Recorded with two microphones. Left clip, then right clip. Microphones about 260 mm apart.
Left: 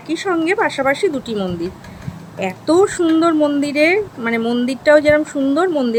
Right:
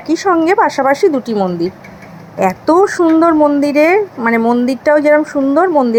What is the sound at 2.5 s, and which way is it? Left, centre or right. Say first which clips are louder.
Speech: right 2 dB; centre.